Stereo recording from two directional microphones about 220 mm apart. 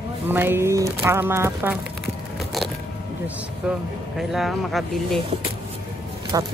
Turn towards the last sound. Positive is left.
turn(degrees=-15)  # may be behind; listen again after turning